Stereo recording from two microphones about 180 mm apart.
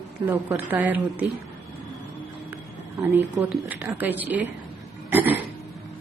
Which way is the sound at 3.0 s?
15° right (ahead or behind).